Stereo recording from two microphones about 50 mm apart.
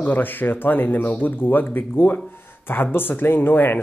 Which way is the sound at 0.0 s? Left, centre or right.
Left.